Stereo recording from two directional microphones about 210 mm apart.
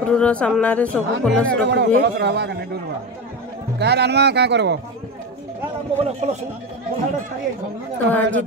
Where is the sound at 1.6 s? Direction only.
55° right (ahead or behind).